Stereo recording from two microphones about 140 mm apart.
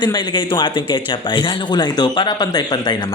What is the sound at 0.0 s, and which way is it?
Speech, 30° left (ahead or behind).